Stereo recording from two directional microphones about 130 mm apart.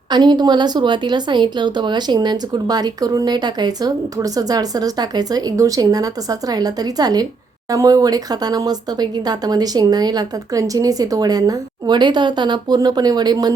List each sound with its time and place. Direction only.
0.1 s speech: 35° right (ahead or behind)